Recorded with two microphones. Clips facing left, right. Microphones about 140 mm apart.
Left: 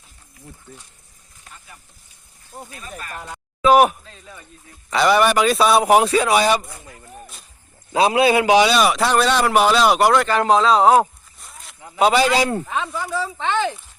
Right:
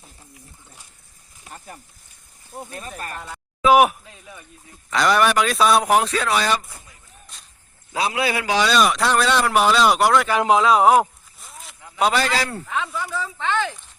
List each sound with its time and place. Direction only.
1.5 s speech: 45° right (ahead or behind)
3.2 s speech: 15° left (ahead or behind)
3.6 s a man's voice: 5° right (ahead or behind)
4.0 s a sound: 15° right (ahead or behind)
4.9 s a man's voice: 5° left (ahead or behind)
6.8 s a sound: 65° left (ahead or behind)
7.9 s a man's voice: 25° left (ahead or behind); by 10.2 s centre (ahead or behind)
10.2 s speech: 10° right (ahead or behind)
11.0 s a sound: centre (ahead or behind)
11.9 s a man's voice: 5° left (ahead or behind); by 12.9 s 20° left (ahead or behind)
13.0 s a sound: 10° left (ahead or behind)
13.2 s speech: 20° left (ahead or behind)